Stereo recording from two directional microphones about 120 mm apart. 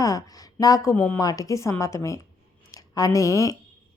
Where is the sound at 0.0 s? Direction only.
30° left (ahead or behind).